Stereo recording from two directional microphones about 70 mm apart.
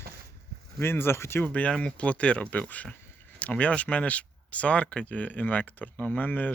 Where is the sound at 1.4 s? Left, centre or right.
Left.